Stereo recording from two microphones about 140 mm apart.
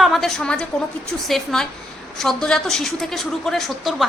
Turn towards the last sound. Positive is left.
turn(degrees=0)  # may be behind; listen again after turning